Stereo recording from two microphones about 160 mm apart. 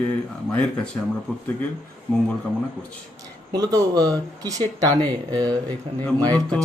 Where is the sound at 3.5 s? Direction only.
25° right (ahead or behind).